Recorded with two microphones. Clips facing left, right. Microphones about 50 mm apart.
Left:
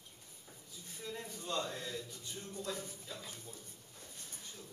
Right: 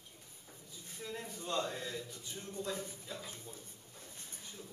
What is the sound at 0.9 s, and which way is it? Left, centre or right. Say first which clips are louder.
A man's voice: right 1 dB; centre.